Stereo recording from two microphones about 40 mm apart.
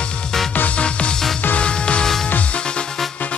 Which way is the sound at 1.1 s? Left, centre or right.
Centre.